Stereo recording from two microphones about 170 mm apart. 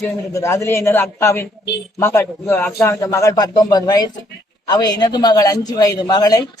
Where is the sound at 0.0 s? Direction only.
15° left (ahead or behind).